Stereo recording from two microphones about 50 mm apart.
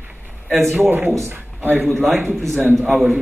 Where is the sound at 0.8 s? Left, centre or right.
Right.